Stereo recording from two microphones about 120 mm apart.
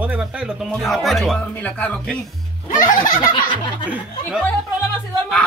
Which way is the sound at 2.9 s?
40° left (ahead or behind).